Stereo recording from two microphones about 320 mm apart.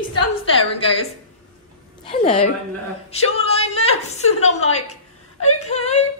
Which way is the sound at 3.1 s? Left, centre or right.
Centre.